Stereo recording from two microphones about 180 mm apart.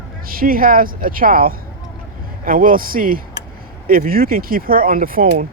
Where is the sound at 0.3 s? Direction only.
55° right (ahead or behind).